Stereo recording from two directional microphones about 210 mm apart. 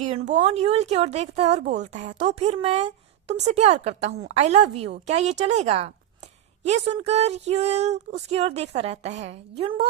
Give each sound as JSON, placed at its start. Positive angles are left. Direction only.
{"t": 0.0, "sound": "speech", "side_deg": -30}